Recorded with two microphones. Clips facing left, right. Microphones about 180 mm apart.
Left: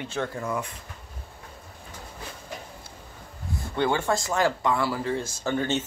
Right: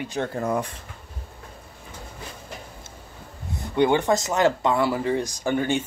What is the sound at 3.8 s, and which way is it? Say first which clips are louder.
Speech: right 5 dB; 20° right (ahead or behind).